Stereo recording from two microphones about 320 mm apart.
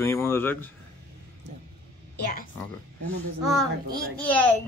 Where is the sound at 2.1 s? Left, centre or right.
Left.